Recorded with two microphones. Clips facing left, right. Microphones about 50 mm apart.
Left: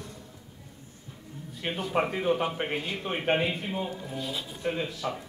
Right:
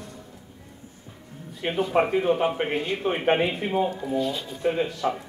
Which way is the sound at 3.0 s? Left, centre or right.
Right.